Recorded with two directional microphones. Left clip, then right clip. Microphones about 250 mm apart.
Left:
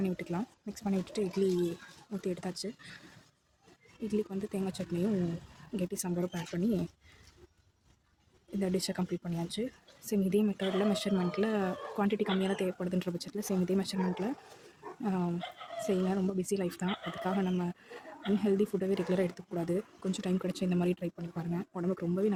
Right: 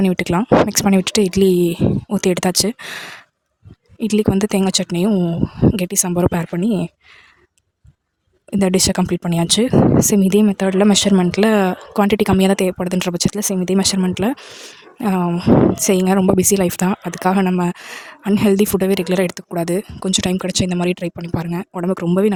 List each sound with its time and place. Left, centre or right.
0.0 s speech: right
4.0 s speech: right
8.5 s speech: right